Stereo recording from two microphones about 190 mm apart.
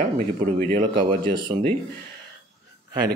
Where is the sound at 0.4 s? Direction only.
45° right (ahead or behind).